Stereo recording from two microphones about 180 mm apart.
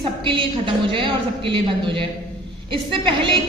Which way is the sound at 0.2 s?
30° right (ahead or behind).